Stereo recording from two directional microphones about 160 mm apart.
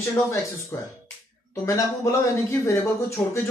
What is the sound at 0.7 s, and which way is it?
A man's voice, 15° left (ahead or behind).